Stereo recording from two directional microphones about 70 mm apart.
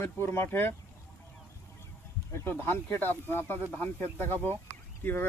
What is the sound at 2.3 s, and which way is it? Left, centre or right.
Speech, left.